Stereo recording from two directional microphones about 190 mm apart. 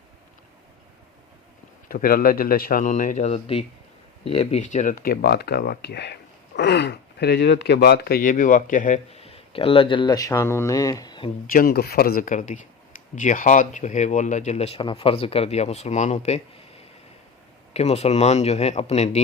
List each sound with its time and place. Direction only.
1.9 s speech: 50° left (ahead or behind); by 11.3 s 20° left (ahead or behind)
11.4 s speech: 50° left (ahead or behind); by 19.2 s 35° left (ahead or behind)